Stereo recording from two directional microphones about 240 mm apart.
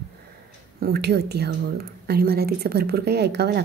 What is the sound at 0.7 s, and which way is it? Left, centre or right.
A woman's voice, right.